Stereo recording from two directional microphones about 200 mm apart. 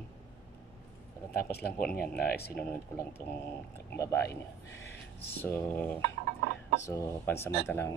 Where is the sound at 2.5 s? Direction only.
10° left (ahead or behind).